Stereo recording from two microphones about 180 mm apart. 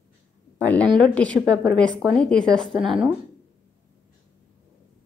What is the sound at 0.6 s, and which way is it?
A woman's voice, 5° left (ahead or behind).